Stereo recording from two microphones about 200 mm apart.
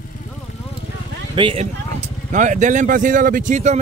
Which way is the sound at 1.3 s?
30° right (ahead or behind).